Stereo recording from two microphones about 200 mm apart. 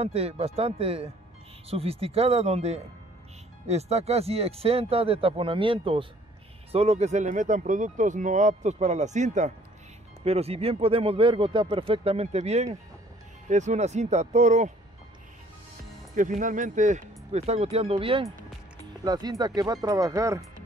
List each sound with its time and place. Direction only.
0.0 s speech: 30° right (ahead or behind)
16.2 s speech: 40° right (ahead or behind); by 20.4 s 15° right (ahead or behind)